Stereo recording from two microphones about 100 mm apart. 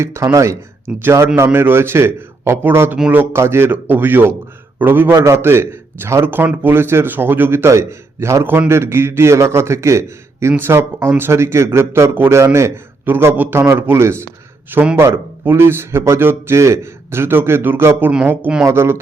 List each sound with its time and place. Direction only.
0.0 s a man's voice: 30° right (ahead or behind)